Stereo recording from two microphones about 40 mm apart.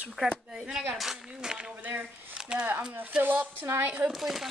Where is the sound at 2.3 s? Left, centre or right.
Right.